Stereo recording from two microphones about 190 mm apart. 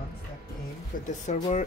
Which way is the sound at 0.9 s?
45° left (ahead or behind).